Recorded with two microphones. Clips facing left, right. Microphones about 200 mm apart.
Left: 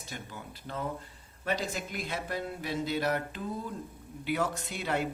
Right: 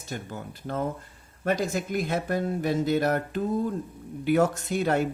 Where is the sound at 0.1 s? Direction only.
50° right (ahead or behind).